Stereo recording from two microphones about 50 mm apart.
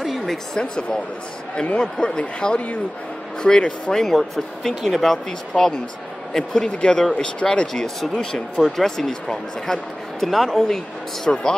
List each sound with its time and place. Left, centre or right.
0.0 s a sound: centre
0.6 s speech: centre
4.0 s speech: centre
7.6 s speech: centre
11.2 s speech: centre